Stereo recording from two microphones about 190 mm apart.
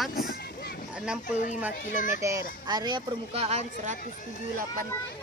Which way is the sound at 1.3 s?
40° left (ahead or behind).